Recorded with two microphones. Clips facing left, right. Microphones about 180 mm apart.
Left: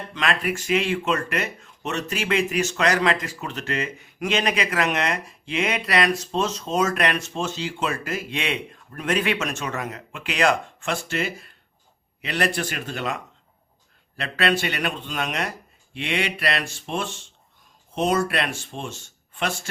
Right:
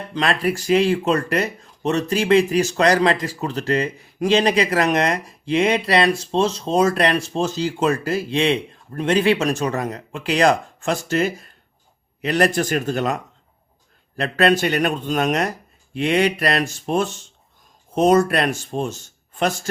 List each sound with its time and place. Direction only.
0.1 s speech: 35° right (ahead or behind)